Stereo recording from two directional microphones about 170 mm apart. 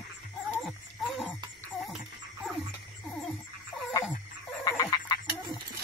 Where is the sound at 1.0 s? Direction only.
Centre (ahead or behind).